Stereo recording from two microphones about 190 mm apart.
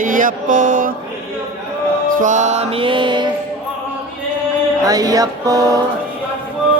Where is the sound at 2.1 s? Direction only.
40° right (ahead or behind); by 3.3 s 25° right (ahead or behind).